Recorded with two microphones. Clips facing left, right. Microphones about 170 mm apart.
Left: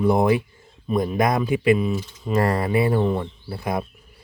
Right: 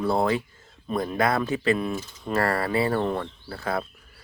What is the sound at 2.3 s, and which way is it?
Speech, 15° left (ahead or behind).